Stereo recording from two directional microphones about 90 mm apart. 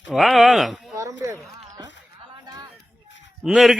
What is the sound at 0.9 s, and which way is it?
Speech, 40° right (ahead or behind).